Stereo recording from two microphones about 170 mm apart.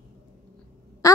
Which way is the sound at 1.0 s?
20° left (ahead or behind).